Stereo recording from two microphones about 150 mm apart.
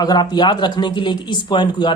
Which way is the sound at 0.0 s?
25° left (ahead or behind).